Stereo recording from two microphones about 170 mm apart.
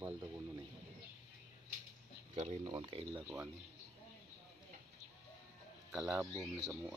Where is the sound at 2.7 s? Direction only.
30° right (ahead or behind).